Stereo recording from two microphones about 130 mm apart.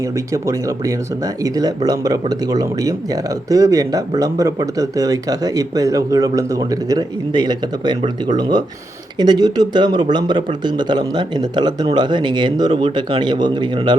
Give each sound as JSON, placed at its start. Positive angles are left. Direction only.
{"t": 1.5, "sound": "speech", "side_deg": -30}